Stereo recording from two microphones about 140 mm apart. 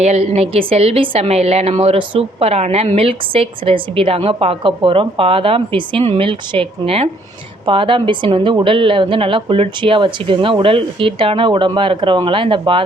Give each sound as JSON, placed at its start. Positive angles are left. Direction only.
{"t": 0.0, "sound": "a woman's voice", "side_deg": -50}